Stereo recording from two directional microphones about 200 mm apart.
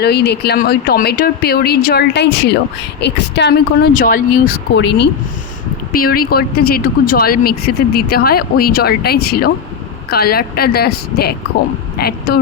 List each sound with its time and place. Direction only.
0.0 s a woman's voice: 55° left (ahead or behind)
3.9 s speech: 45° left (ahead or behind)